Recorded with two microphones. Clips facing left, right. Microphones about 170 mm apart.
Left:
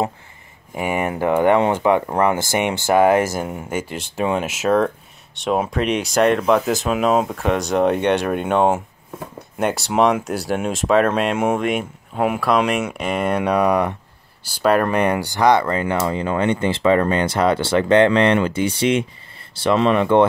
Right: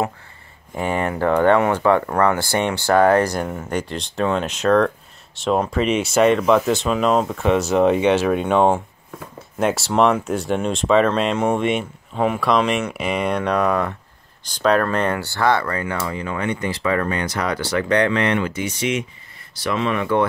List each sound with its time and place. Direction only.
0.7 s speech: 15° left (ahead or behind)
13.4 s speech: 10° left (ahead or behind); by 20.2 s 25° left (ahead or behind)